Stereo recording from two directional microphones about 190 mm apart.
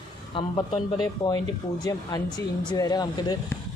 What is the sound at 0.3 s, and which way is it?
Speech, 25° left (ahead or behind).